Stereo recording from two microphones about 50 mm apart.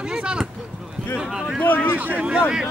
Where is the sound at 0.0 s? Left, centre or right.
Centre.